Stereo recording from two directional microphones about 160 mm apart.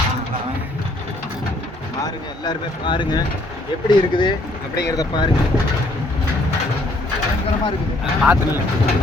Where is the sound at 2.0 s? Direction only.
25° left (ahead or behind).